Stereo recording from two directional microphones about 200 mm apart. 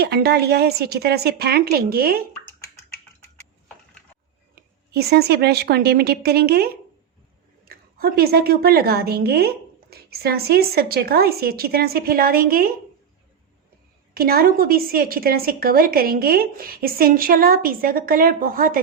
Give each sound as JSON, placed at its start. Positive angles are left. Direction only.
{"t": 0.0, "sound": "a woman's voice", "side_deg": -50}
{"t": 4.9, "sound": "a woman's voice", "side_deg": -55}
{"t": 14.1, "sound": "a woman's voice", "side_deg": -50}